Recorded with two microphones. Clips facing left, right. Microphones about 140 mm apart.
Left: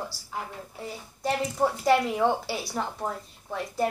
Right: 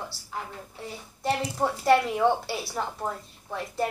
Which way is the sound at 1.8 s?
Centre (ahead or behind).